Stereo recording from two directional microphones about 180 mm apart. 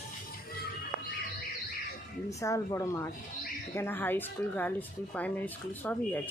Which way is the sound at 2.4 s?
15° left (ahead or behind).